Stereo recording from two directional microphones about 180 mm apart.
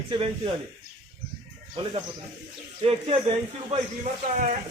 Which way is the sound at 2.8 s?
35° right (ahead or behind).